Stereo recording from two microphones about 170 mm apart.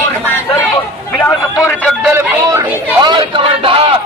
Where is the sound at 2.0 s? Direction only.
10° right (ahead or behind).